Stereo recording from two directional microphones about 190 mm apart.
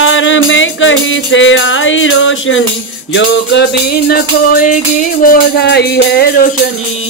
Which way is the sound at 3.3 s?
55° left (ahead or behind).